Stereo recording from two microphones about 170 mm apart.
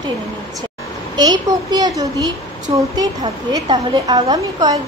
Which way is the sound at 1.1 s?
25° right (ahead or behind).